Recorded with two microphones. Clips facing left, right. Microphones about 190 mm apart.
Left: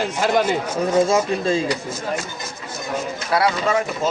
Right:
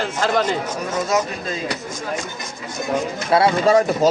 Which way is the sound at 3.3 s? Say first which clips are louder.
Right 5 dB; 30° right (ahead or behind).